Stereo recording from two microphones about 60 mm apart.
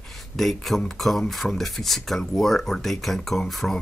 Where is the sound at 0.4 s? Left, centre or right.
Centre.